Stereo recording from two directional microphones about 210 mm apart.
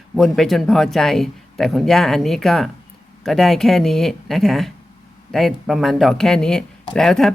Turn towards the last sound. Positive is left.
turn(degrees=0)  # may be behind; listen again after turning